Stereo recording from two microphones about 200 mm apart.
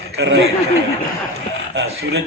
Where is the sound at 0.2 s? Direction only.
60° right (ahead or behind).